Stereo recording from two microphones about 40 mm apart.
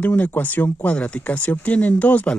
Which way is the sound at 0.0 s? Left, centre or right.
Left.